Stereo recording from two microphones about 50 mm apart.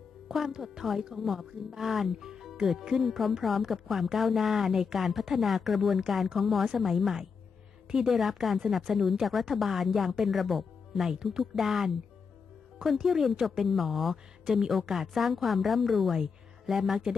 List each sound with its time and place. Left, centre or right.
0.3 s a woman's voice: centre